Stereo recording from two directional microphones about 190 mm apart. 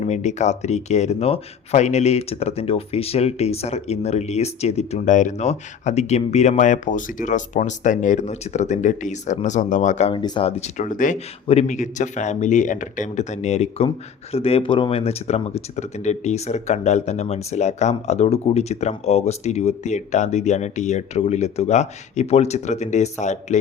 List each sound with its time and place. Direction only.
0.0 s speech: 35° left (ahead or behind)
10.2 s speech: 25° left (ahead or behind)